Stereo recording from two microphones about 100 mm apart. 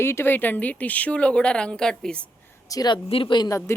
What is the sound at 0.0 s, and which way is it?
Speech, 25° left (ahead or behind).